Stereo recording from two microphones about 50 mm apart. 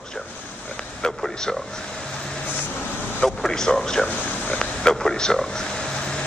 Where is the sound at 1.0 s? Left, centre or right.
Centre.